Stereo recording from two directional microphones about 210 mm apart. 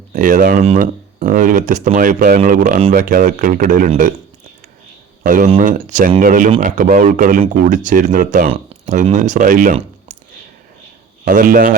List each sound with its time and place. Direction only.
0.1 s speech: 40° right (ahead or behind)
5.2 s speech: 40° right (ahead or behind)
11.3 s speech: 40° right (ahead or behind)